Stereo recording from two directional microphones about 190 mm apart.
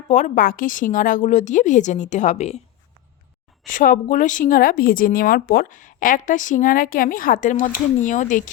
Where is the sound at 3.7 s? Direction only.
45° left (ahead or behind).